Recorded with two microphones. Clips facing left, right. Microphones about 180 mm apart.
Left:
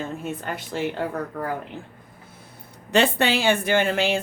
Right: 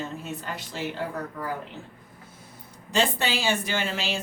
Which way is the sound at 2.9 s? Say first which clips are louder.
Left 6 dB; 65° left (ahead or behind).